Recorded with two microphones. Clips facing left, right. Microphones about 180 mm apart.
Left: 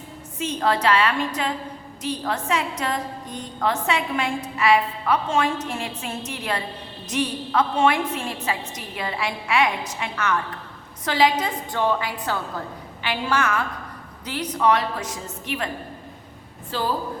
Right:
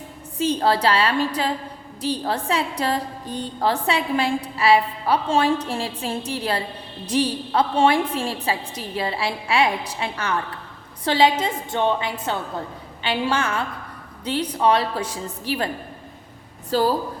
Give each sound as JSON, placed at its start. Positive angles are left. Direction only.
{"t": 0.3, "sound": "a woman's voice", "side_deg": -30}
{"t": 16.7, "sound": "a woman's voice", "side_deg": -40}